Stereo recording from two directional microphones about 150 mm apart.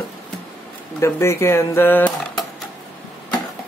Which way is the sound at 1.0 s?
20° left (ahead or behind).